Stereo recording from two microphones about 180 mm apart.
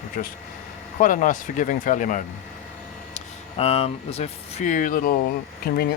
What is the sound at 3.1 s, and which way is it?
Speech, 35° left (ahead or behind).